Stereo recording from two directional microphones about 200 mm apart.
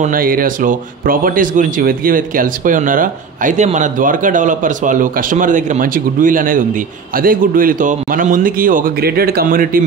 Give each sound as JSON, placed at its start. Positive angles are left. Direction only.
{"t": 0.0, "sound": "speech", "side_deg": -45}